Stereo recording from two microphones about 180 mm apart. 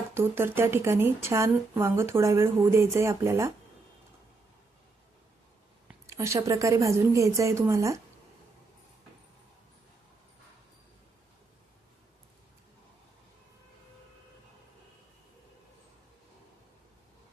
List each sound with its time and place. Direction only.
0.1 s speech: 15° right (ahead or behind)
6.1 s speech: 15° right (ahead or behind)